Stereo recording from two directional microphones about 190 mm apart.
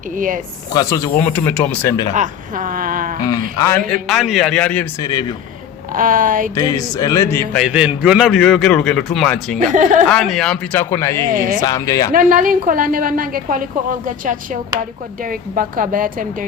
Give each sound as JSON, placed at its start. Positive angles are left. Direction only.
{"t": 0.7, "sound": "speech", "side_deg": 20}
{"t": 2.1, "sound": "a woman's voice", "side_deg": -40}
{"t": 3.7, "sound": "a man's voice", "side_deg": 5}
{"t": 5.9, "sound": "a woman's voice", "side_deg": -45}
{"t": 6.6, "sound": "speech", "side_deg": 20}
{"t": 7.6, "sound": "a man's voice", "side_deg": -5}
{"t": 9.7, "sound": "speech", "side_deg": -40}
{"t": 10.1, "sound": "speech", "side_deg": 0}
{"t": 11.3, "sound": "a woman's voice", "side_deg": -50}
{"t": 11.6, "sound": "speech", "side_deg": 20}
{"t": 12.1, "sound": "a woman's voice", "side_deg": -45}